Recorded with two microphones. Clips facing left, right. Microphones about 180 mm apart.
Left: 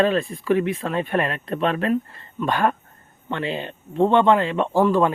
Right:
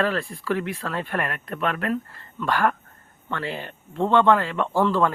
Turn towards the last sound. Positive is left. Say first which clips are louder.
# left 3 dB
turn(degrees=15)  # may be behind; listen again after turning